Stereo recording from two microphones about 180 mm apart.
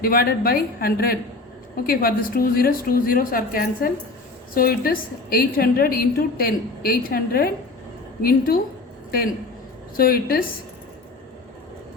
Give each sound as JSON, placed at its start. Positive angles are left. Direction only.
{"t": 0.0, "sound": "a woman's voice", "side_deg": 55}
{"t": 10.0, "sound": "a woman's voice", "side_deg": 55}